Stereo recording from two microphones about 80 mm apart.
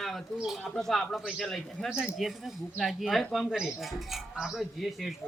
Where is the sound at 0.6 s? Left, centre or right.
Centre.